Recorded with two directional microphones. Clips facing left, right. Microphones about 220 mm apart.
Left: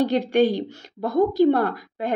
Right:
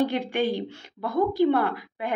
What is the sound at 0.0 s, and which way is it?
A woman's voice, 40° left (ahead or behind).